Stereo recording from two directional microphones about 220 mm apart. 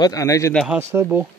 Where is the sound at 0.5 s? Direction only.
5° right (ahead or behind).